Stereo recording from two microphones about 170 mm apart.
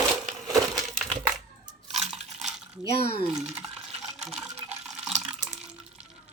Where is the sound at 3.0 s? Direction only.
35° left (ahead or behind).